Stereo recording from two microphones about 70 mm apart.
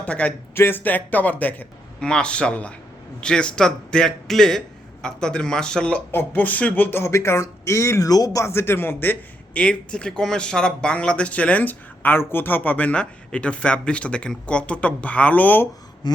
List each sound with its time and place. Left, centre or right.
0.0 s speech: centre
0.5 s a man's voice: left
2.0 s speech: centre
6.1 s speech: left
8.1 s speech: left
8.4 s speech: left
9.6 s speech: centre
16.0 s a sound: left